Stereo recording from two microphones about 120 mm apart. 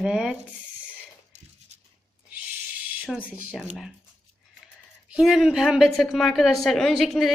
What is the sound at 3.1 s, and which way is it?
Speech, 10° right (ahead or behind).